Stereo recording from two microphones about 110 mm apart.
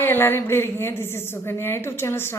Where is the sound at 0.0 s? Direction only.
20° left (ahead or behind).